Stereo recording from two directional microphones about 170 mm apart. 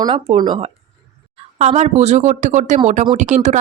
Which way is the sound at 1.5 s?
40° right (ahead or behind).